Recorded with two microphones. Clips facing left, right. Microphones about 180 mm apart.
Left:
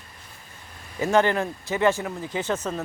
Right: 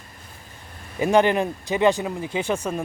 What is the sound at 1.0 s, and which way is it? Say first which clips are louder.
Speech: right 3 dB; 15° right (ahead or behind).